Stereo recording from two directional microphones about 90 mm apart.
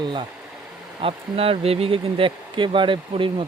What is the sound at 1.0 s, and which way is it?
Speech, 90° right.